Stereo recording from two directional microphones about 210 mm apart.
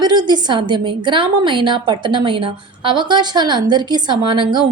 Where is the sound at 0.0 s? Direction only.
20° right (ahead or behind).